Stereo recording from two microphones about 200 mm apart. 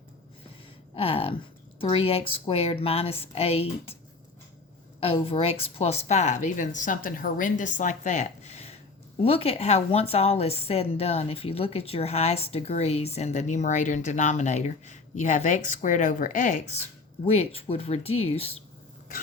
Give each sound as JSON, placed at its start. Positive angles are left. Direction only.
{"t": 0.9, "sound": "speech", "side_deg": 30}
{"t": 4.9, "sound": "a woman's voice", "side_deg": 30}